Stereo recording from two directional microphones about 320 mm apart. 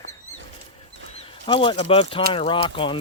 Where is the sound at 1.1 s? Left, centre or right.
Centre.